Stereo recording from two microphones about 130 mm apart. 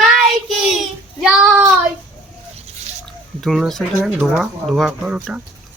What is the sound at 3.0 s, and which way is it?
Speech, 5° left (ahead or behind).